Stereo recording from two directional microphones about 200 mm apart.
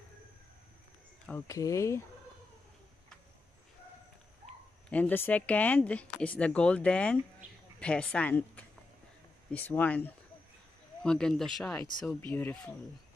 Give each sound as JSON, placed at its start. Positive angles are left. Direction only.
{"t": 1.5, "sound": "speech", "side_deg": 15}
{"t": 4.8, "sound": "speech", "side_deg": 10}